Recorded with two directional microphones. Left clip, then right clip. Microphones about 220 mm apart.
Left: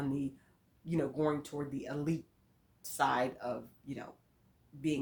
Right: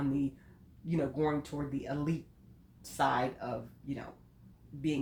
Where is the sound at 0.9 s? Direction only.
30° left (ahead or behind).